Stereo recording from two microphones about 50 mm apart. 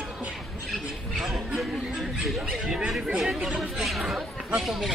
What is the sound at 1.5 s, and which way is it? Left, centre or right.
Speech, centre.